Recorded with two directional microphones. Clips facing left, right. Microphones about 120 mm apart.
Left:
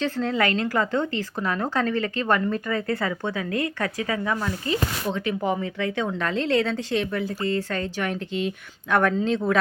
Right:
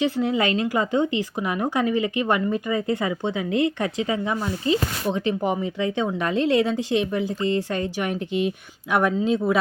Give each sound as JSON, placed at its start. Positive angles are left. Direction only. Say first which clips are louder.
{"t": 0.0, "sound": "speech", "louder": "right 2 dB", "side_deg": -15}